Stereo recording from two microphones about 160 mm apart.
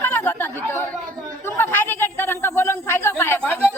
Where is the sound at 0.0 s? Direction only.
10° left (ahead or behind).